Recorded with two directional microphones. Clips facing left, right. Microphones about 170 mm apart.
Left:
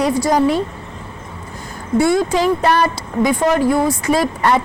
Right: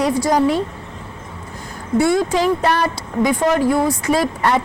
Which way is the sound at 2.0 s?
15° left (ahead or behind).